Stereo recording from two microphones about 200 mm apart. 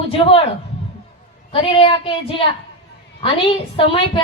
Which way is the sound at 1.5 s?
25° left (ahead or behind).